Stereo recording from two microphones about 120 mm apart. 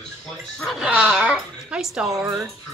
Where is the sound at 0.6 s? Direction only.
Centre (ahead or behind).